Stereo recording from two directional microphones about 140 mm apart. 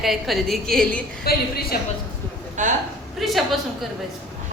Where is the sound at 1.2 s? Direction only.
90° left.